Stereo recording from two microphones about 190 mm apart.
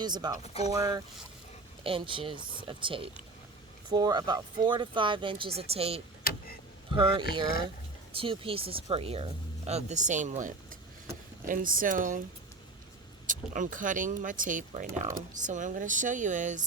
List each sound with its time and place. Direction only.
0.0 s speech: 20° right (ahead or behind)
0.4 s speech: 35° left (ahead or behind)
0.7 s speech: 20° right (ahead or behind)
1.8 s speech: 30° right (ahead or behind)
8.1 s speech: 30° right (ahead or behind); by 12.2 s 45° right (ahead or behind)
13.2 s speech: 45° right (ahead or behind)